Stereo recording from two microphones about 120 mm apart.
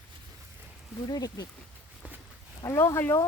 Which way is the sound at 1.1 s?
30° left (ahead or behind).